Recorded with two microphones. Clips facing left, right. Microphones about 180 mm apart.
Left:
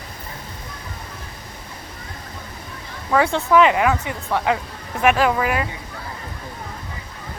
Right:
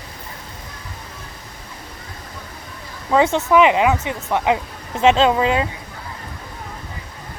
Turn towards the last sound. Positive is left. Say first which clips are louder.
# right 3 dB
turn(degrees=-25)  # may be behind; listen again after turning